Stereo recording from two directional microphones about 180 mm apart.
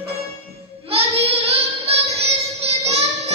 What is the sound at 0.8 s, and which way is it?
Child singing, 35° right (ahead or behind).